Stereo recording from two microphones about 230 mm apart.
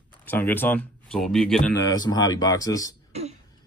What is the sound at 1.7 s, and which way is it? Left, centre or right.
Speech, centre.